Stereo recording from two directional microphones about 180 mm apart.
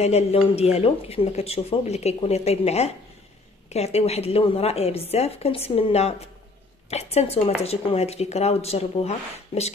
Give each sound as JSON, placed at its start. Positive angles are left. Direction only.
{"t": 0.0, "sound": "speech", "side_deg": 35}